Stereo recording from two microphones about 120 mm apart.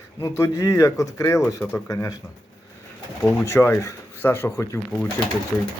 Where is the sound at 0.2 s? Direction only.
25° left (ahead or behind).